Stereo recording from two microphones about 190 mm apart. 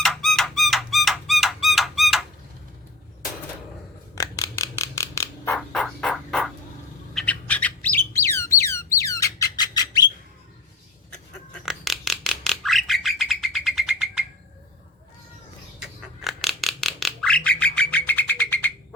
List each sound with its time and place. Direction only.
0.0 s a sound: centre (ahead or behind)
4.1 s a sound: 15° left (ahead or behind)
5.5 s fowl: 5° left (ahead or behind)
7.1 s bird: 5° left (ahead or behind); by 10.1 s 20° left (ahead or behind)
11.6 s bird: centre (ahead or behind)
15.8 s bird: centre (ahead or behind)
17.7 s music: 10° left (ahead or behind)